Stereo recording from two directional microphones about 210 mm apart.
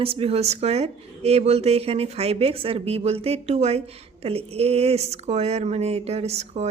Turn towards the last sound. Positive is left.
turn(degrees=-30)  # may be behind; listen again after turning